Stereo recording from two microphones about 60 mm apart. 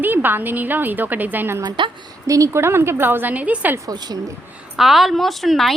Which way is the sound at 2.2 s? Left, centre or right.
Right.